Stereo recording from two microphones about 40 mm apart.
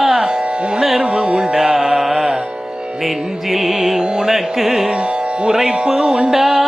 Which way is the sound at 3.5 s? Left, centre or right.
Centre.